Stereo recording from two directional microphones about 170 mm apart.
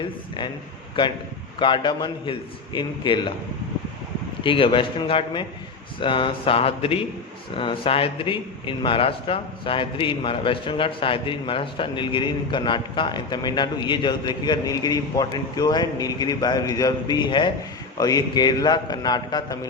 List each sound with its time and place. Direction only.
1.5 s a man's voice: 30° left (ahead or behind)
4.4 s a man's voice: 30° left (ahead or behind)